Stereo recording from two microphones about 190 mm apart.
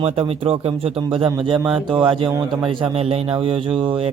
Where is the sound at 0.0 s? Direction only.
30° right (ahead or behind).